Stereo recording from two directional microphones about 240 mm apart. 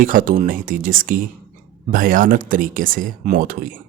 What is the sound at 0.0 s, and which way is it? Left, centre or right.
Speech, right.